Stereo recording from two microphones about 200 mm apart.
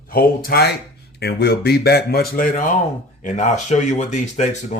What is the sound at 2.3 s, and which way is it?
Speech, 40° left (ahead or behind).